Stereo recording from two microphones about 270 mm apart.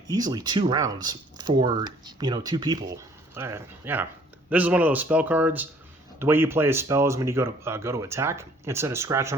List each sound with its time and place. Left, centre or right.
0.1 s speech: centre